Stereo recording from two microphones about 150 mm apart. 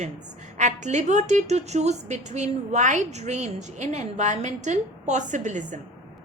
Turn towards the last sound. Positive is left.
turn(degrees=-55)  # may be behind; listen again after turning